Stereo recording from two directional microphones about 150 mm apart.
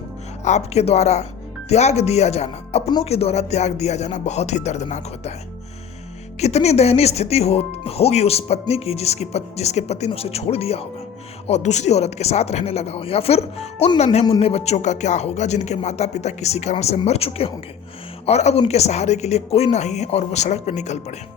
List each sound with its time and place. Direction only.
0.4 s speech: 50° left (ahead or behind)
6.4 s speech: 45° left (ahead or behind)